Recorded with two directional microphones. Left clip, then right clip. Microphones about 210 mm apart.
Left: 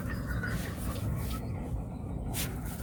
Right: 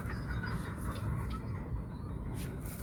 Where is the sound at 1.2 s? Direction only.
35° right (ahead or behind).